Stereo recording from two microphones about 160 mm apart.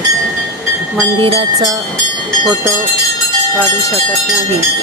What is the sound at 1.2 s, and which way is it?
Speech, 30° right (ahead or behind).